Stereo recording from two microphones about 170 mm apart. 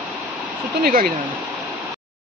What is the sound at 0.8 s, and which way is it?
Speech, 60° right (ahead or behind).